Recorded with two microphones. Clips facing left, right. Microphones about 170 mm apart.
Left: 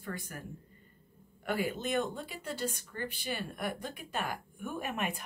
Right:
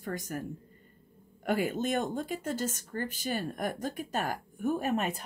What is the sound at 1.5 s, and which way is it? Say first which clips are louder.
Speech: right 4 dB; 45° right (ahead or behind).